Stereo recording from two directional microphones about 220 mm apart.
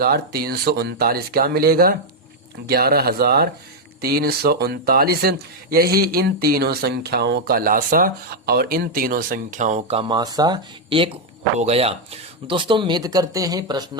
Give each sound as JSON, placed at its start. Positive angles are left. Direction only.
{"t": 0.0, "sound": "a man's voice", "side_deg": -45}